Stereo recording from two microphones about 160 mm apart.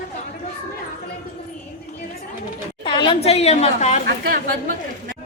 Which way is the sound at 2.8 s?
30° left (ahead or behind).